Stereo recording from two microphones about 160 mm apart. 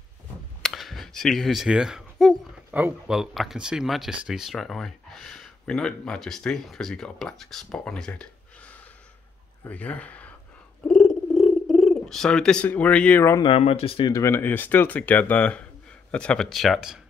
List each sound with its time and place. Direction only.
0.6 s a sound: centre (ahead or behind)
2.7 s speech: 5° right (ahead or behind); by 10.3 s 10° left (ahead or behind)
10.9 s purr: 5° left (ahead or behind)
13.4 s speech: 40° left (ahead or behind)
14.1 s speech: 15° left (ahead or behind); by 17.0 s centre (ahead or behind)